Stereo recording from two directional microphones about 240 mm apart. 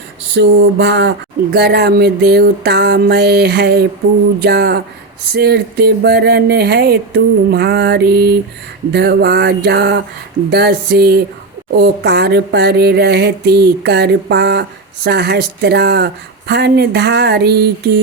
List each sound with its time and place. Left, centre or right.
0.3 s speech: right
1.5 s music: right
4.4 s speech: right